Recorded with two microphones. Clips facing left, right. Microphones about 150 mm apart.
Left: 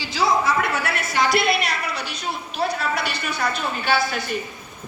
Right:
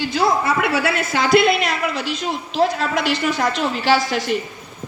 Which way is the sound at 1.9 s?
90° right.